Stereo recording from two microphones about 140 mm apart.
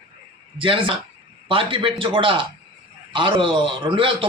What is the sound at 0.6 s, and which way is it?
A man's voice, 40° right (ahead or behind).